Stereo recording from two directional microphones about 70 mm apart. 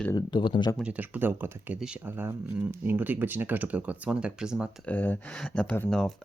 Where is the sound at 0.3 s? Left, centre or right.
Left.